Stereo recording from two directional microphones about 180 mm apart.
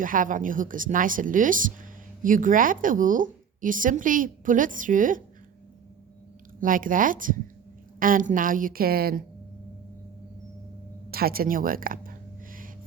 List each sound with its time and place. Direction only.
0.0 s a woman's voice: 50° right (ahead or behind)
6.6 s a woman's voice: 50° right (ahead or behind)
11.1 s a sound: 55° right (ahead or behind)